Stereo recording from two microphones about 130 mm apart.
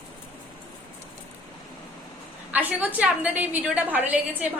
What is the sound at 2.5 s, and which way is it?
A woman's voice, 10° right (ahead or behind).